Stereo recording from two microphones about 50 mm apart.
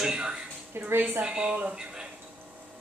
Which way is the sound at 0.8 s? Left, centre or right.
Right.